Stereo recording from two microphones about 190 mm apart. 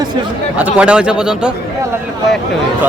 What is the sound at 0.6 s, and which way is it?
Cattle, 5° right (ahead or behind).